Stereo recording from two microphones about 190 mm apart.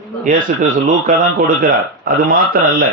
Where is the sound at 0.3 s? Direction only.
45° right (ahead or behind).